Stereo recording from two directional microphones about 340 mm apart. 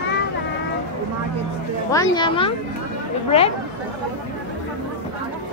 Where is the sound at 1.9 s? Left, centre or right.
Centre.